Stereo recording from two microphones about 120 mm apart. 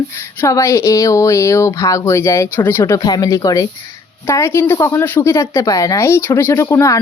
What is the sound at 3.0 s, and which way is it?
Speech, 35° left (ahead or behind).